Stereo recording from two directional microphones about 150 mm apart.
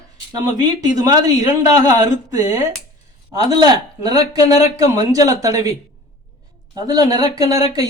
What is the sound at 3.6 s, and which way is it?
Speech, 25° right (ahead or behind).